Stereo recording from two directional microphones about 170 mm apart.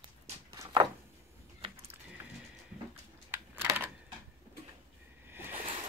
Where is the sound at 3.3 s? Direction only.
10° right (ahead or behind).